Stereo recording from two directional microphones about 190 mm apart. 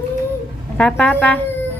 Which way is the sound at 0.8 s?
5° left (ahead or behind).